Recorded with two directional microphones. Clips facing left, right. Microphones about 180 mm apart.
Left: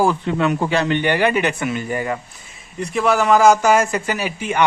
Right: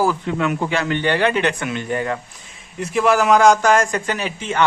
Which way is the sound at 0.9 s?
15° left (ahead or behind).